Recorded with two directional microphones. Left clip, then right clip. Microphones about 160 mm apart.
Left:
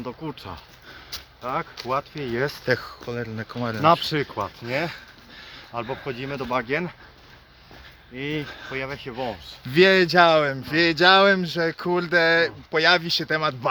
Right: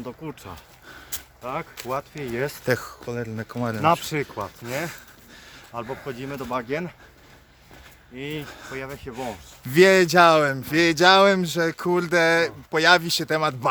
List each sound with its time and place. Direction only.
0.0 s speech: centre (ahead or behind)
2.6 s speech: 55° right (ahead or behind)
3.1 s speech: 40° right (ahead or behind)
3.8 s speech: centre (ahead or behind)
5.5 s a sound: centre (ahead or behind)
6.1 s speech: 5° left (ahead or behind)
8.1 s speech: 10° left (ahead or behind)
8.4 s speech: 30° right (ahead or behind)
8.7 s speech: 5° left (ahead or behind)
9.1 s speech: 45° right (ahead or behind)
10.1 s speech: 60° right (ahead or behind); by 12.8 s 40° right (ahead or behind)
12.8 s speech: 60° right (ahead or behind)